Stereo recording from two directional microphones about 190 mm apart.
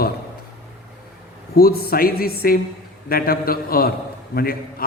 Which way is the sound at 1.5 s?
55° left (ahead or behind).